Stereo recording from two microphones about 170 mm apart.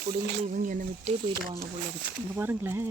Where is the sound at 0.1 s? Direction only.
50° right (ahead or behind).